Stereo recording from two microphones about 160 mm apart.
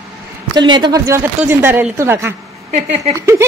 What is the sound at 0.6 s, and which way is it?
A woman's voice, 30° right (ahead or behind).